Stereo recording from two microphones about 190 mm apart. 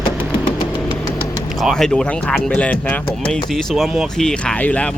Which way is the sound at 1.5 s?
Centre (ahead or behind).